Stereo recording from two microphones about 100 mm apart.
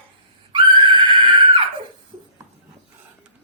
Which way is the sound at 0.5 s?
55° right (ahead or behind).